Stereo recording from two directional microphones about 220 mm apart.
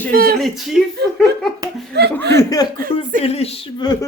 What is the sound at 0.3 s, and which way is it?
Speech, centre (ahead or behind).